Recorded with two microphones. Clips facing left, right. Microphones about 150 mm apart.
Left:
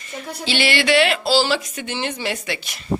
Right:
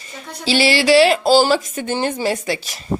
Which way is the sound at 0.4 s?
30° right (ahead or behind).